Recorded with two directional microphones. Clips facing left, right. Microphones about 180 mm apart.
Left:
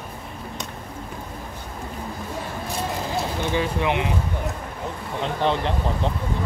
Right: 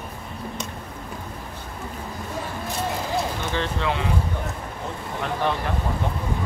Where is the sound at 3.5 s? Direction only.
15° left (ahead or behind).